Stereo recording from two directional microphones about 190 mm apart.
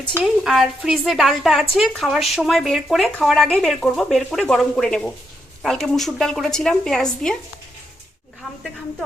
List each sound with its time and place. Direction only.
0.1 s speech: 5° right (ahead or behind)